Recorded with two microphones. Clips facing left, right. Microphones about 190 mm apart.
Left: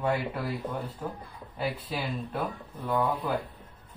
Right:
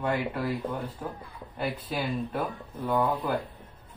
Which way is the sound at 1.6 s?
Centre (ahead or behind).